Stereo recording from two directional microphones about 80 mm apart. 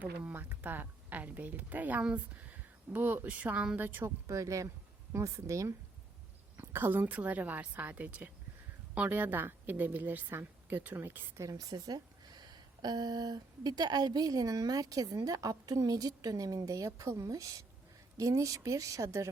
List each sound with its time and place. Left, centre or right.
0.0 s a woman's voice: right
4.3 s speech: right
6.7 s a woman's voice: right
7.0 s a woman's voice: centre
11.3 s a woman's voice: right